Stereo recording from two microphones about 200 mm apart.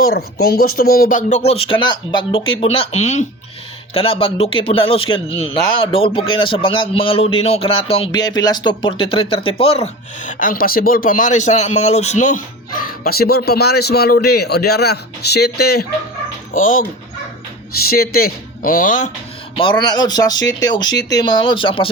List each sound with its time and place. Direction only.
0.0 s a man's voice: 50° left (ahead or behind)
16.5 s speech: 40° left (ahead or behind)
17.8 s speech: 50° left (ahead or behind)
19.5 s a man's voice: 25° left (ahead or behind)
20.8 s speech: 60° left (ahead or behind)
21.1 s a man's voice: 20° left (ahead or behind)